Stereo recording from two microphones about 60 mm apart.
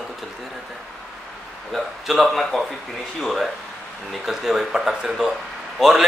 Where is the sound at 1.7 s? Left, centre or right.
Centre.